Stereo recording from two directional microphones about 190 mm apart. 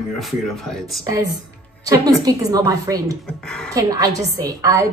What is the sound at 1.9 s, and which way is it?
A woman's voice, 20° right (ahead or behind).